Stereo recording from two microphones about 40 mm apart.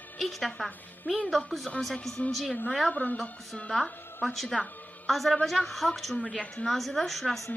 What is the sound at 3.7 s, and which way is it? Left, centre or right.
Speech, centre.